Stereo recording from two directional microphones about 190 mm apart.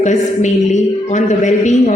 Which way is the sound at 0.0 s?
40° left (ahead or behind).